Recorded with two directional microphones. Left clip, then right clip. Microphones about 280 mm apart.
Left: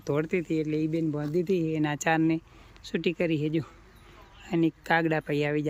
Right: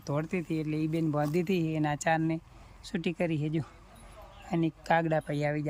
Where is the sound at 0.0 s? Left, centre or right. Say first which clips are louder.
Left 5 dB; centre.